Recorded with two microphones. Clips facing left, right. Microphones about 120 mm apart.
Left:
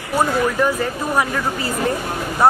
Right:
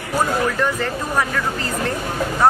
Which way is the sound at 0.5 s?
10° left (ahead or behind).